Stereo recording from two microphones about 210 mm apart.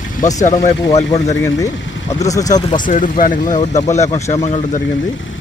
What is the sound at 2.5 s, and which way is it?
Speech, 35° left (ahead or behind).